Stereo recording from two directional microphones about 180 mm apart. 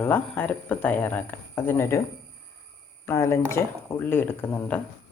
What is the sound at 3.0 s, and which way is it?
Speech, 15° left (ahead or behind).